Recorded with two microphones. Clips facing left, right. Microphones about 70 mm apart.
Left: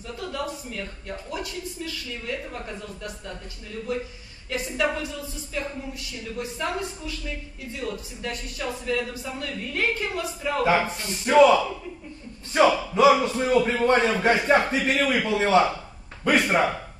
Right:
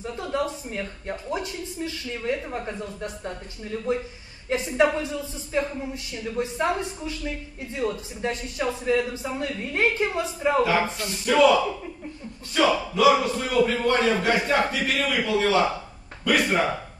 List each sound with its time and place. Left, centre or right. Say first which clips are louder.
0.0 s a man's voice: right 4 dB; right
11.2 s a man's voice: left 2 dB; left
12.5 s a man's voice: left 2 dB; left